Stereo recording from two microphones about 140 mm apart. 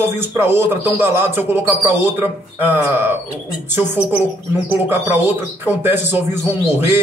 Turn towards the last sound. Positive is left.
turn(degrees=-15)  # may be behind; listen again after turning